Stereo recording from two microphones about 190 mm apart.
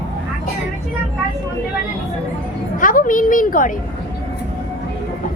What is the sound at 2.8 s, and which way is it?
Speech, 45° left (ahead or behind).